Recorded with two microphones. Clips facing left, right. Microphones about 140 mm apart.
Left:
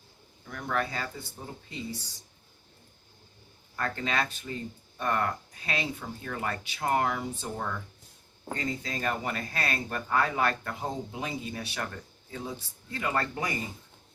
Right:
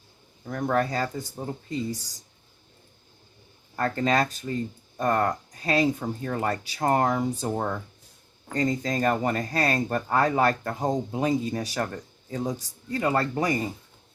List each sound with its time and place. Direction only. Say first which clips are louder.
0.4 s speech: right 7 dB; 40° right (ahead or behind)
3.8 s speech: right 7 dB; 40° right (ahead or behind)